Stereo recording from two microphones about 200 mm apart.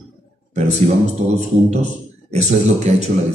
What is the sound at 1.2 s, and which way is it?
Speech, 35° right (ahead or behind).